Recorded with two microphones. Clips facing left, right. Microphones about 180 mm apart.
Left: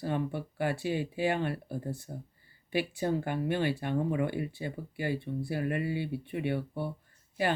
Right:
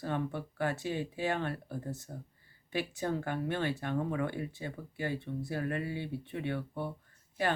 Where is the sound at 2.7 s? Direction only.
15° left (ahead or behind).